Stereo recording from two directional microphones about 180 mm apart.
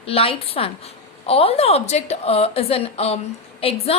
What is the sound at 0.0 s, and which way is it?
A woman's voice, 30° left (ahead or behind).